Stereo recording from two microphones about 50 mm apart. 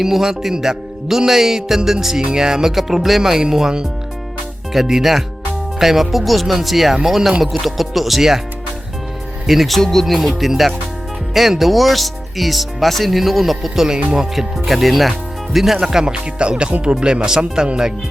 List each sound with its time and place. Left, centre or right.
0.0 s a man's voice: centre
9.5 s a man's voice: centre